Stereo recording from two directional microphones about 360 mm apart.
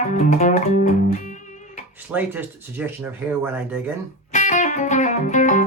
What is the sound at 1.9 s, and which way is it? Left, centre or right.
Speech, centre.